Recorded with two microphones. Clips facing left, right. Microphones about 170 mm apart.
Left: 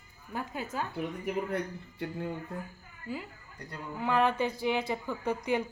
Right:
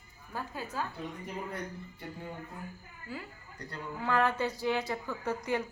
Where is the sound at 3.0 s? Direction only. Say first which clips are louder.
Left 4 dB; 20° left (ahead or behind).